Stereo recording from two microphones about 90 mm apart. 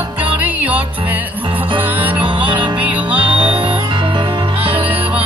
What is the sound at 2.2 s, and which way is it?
Music, 70° right (ahead or behind).